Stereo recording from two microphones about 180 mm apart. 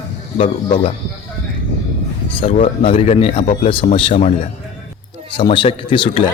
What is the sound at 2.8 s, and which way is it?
Speech, 35° left (ahead or behind).